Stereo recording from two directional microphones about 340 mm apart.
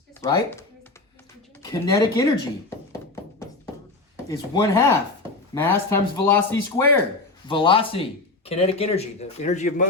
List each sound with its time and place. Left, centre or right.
0.2 s speech: centre
1.6 s speech: centre
4.3 s a man's voice: centre